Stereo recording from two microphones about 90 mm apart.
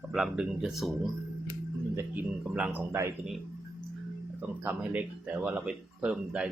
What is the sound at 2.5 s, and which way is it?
Speech, 10° right (ahead or behind).